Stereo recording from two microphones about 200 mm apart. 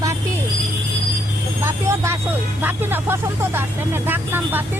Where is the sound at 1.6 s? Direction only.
15° right (ahead or behind).